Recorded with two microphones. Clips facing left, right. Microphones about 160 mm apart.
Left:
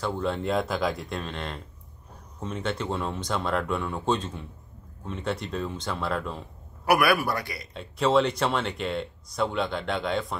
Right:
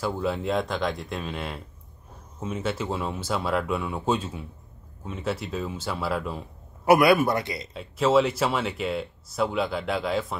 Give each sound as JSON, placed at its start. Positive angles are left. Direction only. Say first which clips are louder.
{"t": 0.0, "sound": "speech", "louder": "right 1 dB", "side_deg": -5}
{"t": 6.8, "sound": "a man's voice", "louder": "right 4 dB", "side_deg": -20}
{"t": 7.7, "sound": "speech", "louder": "right 2 dB", "side_deg": 0}